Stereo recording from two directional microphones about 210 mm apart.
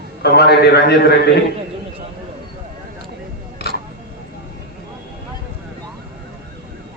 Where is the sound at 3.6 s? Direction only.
50° left (ahead or behind).